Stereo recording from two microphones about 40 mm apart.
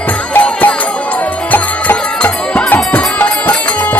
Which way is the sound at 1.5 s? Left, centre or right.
Left.